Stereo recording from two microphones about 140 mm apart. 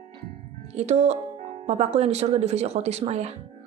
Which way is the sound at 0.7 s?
50° right (ahead or behind).